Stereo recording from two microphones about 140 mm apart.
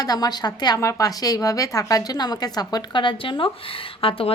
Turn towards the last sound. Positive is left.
turn(degrees=40)  # may be behind; listen again after turning